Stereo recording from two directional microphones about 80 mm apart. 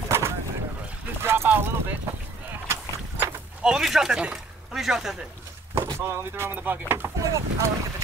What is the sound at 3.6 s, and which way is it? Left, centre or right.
Speech, centre.